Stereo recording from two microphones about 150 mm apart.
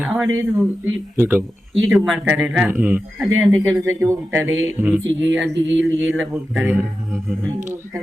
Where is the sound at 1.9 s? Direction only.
5° right (ahead or behind).